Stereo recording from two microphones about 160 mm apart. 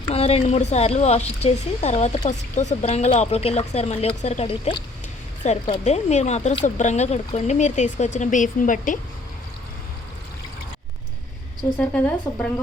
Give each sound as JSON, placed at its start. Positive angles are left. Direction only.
{"t": 0.1, "sound": "speech", "side_deg": 40}
{"t": 11.8, "sound": "speech", "side_deg": 5}